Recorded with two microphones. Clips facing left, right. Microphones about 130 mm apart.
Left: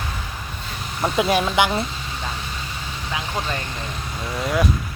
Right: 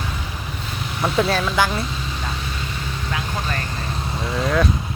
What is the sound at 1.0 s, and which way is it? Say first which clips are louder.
Speech: left 1 dB; 10° left (ahead or behind).